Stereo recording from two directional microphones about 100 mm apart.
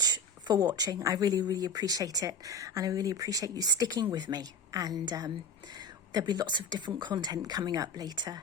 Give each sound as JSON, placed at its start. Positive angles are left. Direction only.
{"t": 0.0, "sound": "speech", "side_deg": -40}